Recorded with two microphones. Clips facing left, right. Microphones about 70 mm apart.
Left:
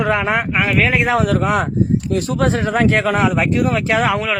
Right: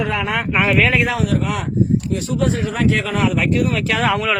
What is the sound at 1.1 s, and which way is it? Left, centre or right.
Speech, left.